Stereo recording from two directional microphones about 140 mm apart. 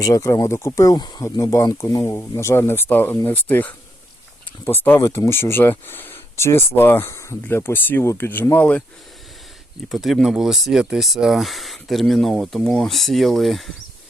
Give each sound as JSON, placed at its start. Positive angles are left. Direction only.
{"t": 0.0, "sound": "speech", "side_deg": 25}
{"t": 9.9, "sound": "speech", "side_deg": 0}